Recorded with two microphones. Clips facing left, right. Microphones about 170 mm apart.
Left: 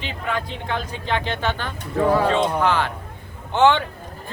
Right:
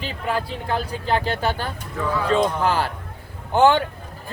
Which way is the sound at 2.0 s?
40° left (ahead or behind).